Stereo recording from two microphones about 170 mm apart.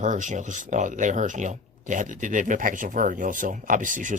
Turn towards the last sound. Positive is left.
turn(degrees=-50)  # may be behind; listen again after turning